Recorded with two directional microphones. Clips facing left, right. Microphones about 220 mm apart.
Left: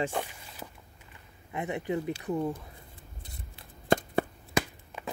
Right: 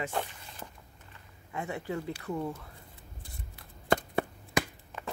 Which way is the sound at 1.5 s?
20° left (ahead or behind).